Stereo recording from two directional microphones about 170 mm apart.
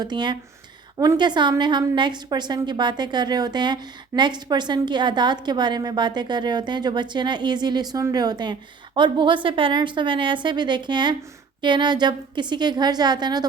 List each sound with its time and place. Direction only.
0.0 s a woman's voice: 25° right (ahead or behind)